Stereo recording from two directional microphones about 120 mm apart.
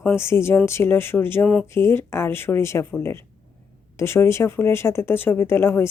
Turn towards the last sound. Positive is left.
turn(degrees=20)  # may be behind; listen again after turning